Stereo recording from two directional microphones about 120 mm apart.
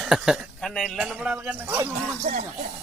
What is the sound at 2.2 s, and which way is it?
Speech, 85° right.